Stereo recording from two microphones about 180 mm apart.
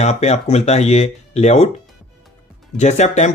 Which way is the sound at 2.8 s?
40° left (ahead or behind).